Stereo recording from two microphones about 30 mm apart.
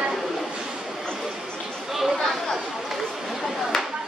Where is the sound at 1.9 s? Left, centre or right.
Centre.